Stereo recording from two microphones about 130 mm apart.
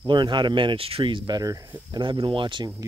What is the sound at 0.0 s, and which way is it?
Speech, 35° right (ahead or behind).